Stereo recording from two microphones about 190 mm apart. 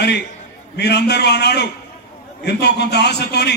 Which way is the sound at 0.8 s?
60° left (ahead or behind).